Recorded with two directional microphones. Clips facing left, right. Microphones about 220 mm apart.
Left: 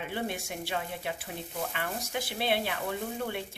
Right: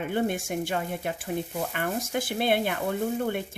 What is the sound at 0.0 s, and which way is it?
Speech, 50° right (ahead or behind).